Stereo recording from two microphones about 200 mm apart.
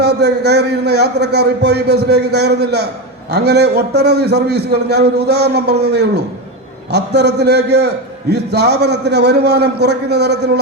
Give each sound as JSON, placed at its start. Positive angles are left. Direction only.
{"t": 0.0, "sound": "a man's voice", "side_deg": -55}